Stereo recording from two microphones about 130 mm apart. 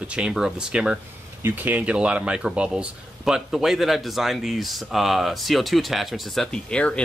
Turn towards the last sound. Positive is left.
turn(degrees=5)  # may be behind; listen again after turning